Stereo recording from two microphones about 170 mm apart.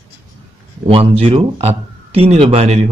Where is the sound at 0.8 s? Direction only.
35° right (ahead or behind).